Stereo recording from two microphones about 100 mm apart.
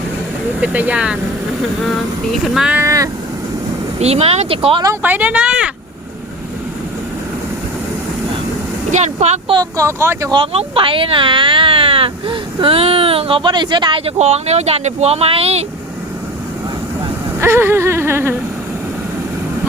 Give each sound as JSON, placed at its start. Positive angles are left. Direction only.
{"t": 0.6, "sound": "speech", "side_deg": -15}
{"t": 2.3, "sound": "speech", "side_deg": -5}
{"t": 2.7, "sound": "speech", "side_deg": -30}
{"t": 4.0, "sound": "speech", "side_deg": -85}
{"t": 5.0, "sound": "speech", "side_deg": -15}
{"t": 9.6, "sound": "speech", "side_deg": -30}
{"t": 10.3, "sound": "speech", "side_deg": -75}
{"t": 14.0, "sound": "speech", "side_deg": -90}
{"t": 17.4, "sound": "whimper", "side_deg": -25}